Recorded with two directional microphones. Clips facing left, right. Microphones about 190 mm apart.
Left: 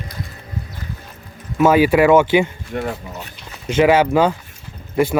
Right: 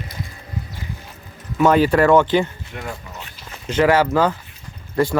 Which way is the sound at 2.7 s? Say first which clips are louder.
Left 11 dB; 45° left (ahead or behind).